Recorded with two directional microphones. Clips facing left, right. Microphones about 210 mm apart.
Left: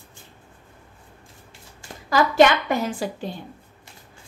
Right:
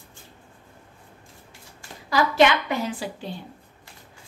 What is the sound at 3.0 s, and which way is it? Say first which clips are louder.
Speech: left 4 dB; 45° left (ahead or behind).